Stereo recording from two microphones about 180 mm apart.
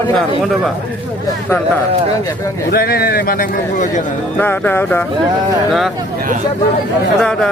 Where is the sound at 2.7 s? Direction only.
60° left (ahead or behind).